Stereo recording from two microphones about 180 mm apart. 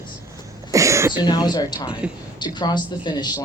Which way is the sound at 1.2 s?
25° left (ahead or behind).